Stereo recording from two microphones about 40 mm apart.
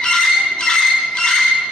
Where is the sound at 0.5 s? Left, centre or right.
Centre.